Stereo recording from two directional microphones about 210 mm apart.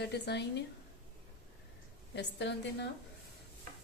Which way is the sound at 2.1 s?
55° left (ahead or behind).